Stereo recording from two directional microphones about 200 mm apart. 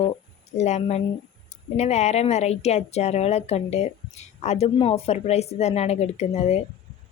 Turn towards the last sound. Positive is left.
turn(degrees=30)  # may be behind; listen again after turning